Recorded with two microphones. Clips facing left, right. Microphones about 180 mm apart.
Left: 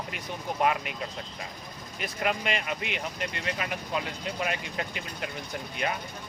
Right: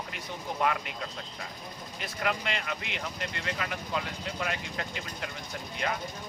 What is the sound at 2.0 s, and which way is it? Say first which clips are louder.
Speech: left 3 dB; 15° left (ahead or behind).